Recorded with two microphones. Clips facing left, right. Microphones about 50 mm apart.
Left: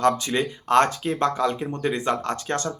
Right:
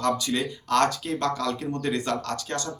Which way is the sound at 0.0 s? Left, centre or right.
Left.